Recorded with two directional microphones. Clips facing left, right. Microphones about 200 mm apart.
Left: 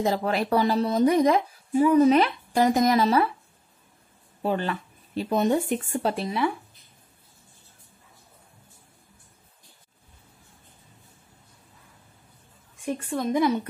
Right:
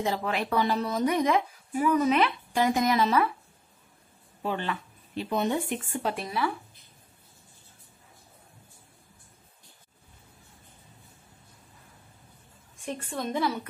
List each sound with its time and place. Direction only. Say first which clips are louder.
0.0 s speech: left 4 dB; 40° left (ahead or behind)
4.4 s speech: left 4 dB; 40° left (ahead or behind)
6.1 s speech: left 4 dB; 25° left (ahead or behind)
12.8 s a woman's voice: left 5 dB; 5° left (ahead or behind)